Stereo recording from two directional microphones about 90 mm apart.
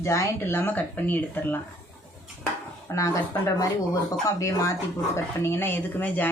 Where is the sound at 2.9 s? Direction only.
35° left (ahead or behind).